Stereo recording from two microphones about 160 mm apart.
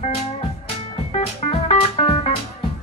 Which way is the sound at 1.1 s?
40° left (ahead or behind).